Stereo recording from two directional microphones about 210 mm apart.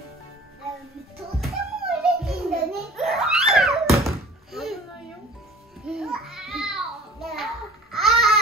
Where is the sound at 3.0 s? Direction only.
Centre (ahead or behind).